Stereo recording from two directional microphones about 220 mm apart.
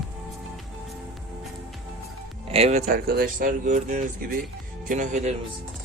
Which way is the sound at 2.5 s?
30° right (ahead or behind).